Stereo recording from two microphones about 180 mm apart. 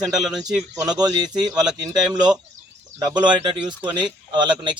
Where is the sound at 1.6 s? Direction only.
20° right (ahead or behind).